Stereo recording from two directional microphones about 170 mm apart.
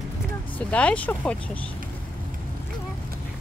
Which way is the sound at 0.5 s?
5° left (ahead or behind).